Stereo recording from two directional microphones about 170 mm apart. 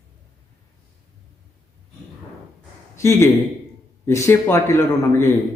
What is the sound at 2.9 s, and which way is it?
A man's voice, 15° left (ahead or behind).